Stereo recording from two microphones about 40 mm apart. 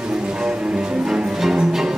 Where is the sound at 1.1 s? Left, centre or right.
Centre.